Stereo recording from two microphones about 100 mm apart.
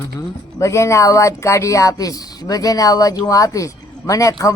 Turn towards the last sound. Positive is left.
turn(degrees=35)  # may be behind; listen again after turning